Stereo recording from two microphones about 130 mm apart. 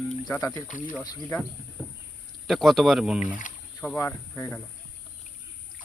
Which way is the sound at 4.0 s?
20° left (ahead or behind).